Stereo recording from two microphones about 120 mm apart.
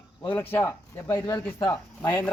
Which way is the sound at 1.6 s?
30° left (ahead or behind).